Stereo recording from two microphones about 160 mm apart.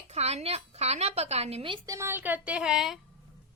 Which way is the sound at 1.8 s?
20° right (ahead or behind).